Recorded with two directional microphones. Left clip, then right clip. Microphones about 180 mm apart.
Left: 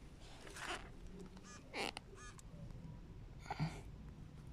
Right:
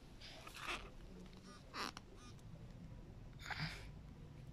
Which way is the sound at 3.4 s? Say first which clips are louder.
Even; 25° left (ahead or behind).